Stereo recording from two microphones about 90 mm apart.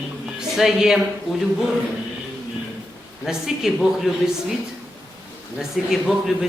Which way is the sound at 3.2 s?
5° right (ahead or behind).